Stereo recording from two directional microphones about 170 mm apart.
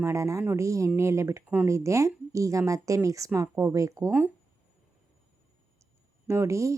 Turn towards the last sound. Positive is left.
turn(degrees=-15)  # may be behind; listen again after turning